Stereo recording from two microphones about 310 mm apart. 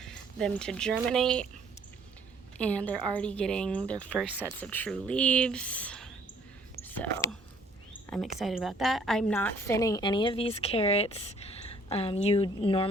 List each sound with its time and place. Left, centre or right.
0.0 s speech: centre
2.6 s speech: centre
6.7 s whispering: centre
8.4 s a woman's voice: centre